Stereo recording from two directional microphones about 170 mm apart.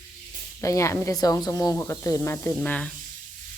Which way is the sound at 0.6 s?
20° left (ahead or behind).